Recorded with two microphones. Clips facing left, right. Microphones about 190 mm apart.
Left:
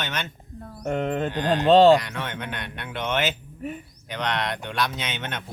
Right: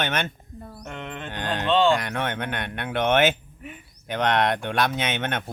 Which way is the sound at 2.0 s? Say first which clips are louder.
Right 2 dB; 55° right (ahead or behind).